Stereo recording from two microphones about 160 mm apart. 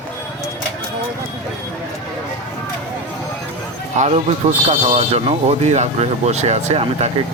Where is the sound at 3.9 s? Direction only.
45° right (ahead or behind).